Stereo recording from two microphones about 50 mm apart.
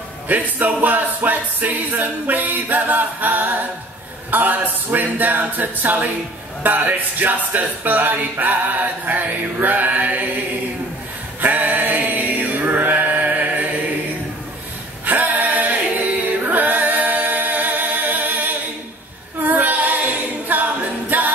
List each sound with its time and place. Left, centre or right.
0.3 s music: right
11.4 s a sound: right
15.0 s chant: right
19.4 s female singing: right
20.4 s a capella: right